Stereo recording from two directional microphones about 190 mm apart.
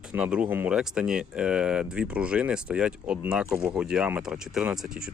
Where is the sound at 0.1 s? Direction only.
5° right (ahead or behind).